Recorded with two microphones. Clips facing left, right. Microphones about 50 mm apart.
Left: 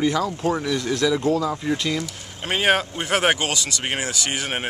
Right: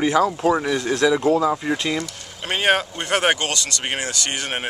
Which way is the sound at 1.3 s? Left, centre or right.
Right.